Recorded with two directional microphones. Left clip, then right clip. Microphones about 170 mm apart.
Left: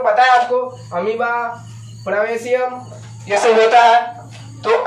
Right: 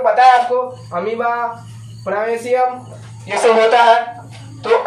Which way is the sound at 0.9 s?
15° right (ahead or behind).